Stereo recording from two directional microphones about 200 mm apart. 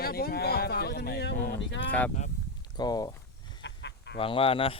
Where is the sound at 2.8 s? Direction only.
20° left (ahead or behind).